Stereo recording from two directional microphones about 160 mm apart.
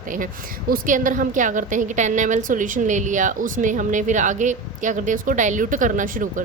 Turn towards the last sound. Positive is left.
turn(degrees=-55)  # may be behind; listen again after turning